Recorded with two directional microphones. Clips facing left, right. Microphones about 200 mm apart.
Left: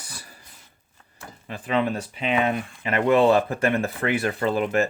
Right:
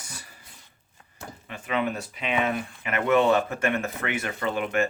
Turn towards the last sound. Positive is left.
turn(degrees=35)  # may be behind; listen again after turning